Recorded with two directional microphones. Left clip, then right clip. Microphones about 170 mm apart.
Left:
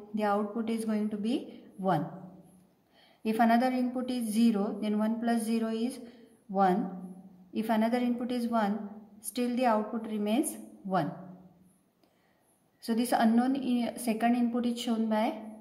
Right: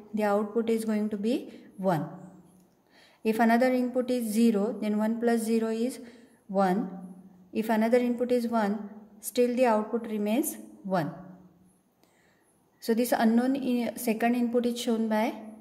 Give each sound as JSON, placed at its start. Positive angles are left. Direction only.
{"t": 0.1, "sound": "a woman's voice", "side_deg": -35}
{"t": 3.3, "sound": "a woman's voice", "side_deg": -35}
{"t": 12.8, "sound": "a woman's voice", "side_deg": -35}